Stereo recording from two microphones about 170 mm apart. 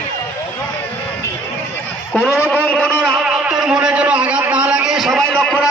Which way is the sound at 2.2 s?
10° right (ahead or behind).